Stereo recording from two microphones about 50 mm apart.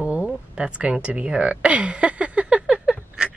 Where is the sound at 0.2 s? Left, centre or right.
Right.